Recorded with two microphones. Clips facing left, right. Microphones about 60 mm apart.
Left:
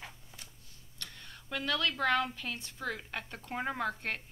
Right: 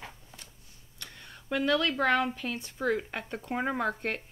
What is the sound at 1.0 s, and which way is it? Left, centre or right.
Speech, centre.